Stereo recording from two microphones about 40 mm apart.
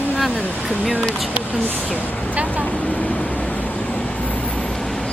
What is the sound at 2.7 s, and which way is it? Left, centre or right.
Vehicle, left.